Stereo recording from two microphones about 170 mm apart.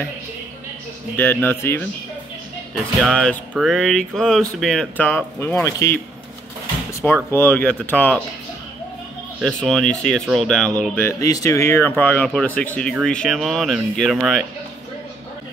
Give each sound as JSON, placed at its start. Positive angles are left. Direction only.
{"t": 1.1, "sound": "speech", "side_deg": 10}
{"t": 2.7, "sound": "music", "side_deg": 0}
{"t": 7.0, "sound": "speech", "side_deg": 5}
{"t": 9.6, "sound": "music", "side_deg": 5}
{"t": 11.1, "sound": "speech", "side_deg": 20}
{"t": 13.0, "sound": "music", "side_deg": 5}